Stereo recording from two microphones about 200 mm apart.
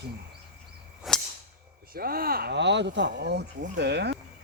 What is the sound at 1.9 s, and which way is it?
Speech, 50° right (ahead or behind).